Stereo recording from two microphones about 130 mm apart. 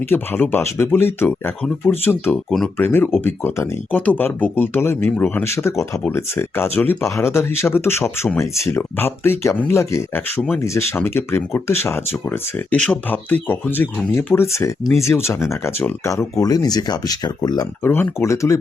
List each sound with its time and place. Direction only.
0.1 s speech: 15° left (ahead or behind)
17.8 s speech: 20° left (ahead or behind)